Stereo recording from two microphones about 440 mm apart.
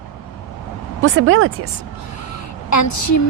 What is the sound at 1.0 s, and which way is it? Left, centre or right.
Speech, right.